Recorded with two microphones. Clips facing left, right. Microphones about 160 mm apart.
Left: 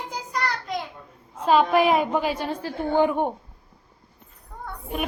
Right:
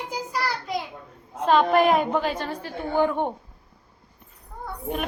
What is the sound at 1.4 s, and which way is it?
A woman's voice, 5° left (ahead or behind).